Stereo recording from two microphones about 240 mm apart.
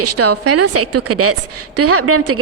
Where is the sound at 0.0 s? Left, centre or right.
Right.